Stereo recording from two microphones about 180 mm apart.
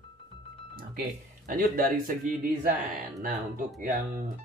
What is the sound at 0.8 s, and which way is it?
Speech, 50° right (ahead or behind).